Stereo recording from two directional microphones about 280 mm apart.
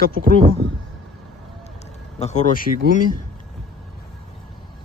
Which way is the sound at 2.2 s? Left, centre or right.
Left.